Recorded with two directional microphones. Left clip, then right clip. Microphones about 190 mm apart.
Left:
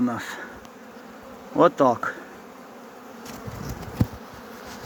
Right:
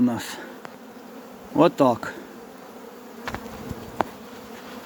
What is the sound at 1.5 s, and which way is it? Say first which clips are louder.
Speech: even; 25° right (ahead or behind).